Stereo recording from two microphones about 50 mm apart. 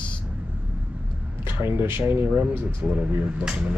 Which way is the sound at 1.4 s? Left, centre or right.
Right.